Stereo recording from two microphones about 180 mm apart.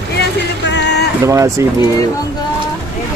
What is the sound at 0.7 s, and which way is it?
Music, 70° left (ahead or behind).